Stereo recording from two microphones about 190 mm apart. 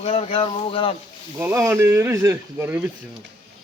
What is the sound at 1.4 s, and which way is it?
Speech, 15° right (ahead or behind).